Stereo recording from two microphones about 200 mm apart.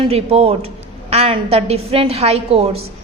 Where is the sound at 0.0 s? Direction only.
30° right (ahead or behind).